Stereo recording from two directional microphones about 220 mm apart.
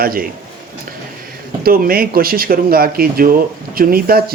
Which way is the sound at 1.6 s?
40° right (ahead or behind).